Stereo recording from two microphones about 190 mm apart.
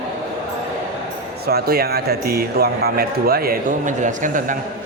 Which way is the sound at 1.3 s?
55° right (ahead or behind).